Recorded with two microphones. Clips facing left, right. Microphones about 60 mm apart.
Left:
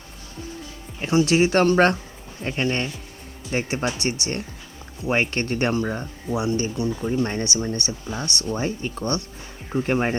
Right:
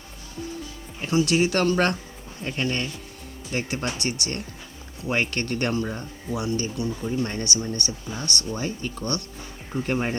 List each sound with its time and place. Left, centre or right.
1.0 s speech: left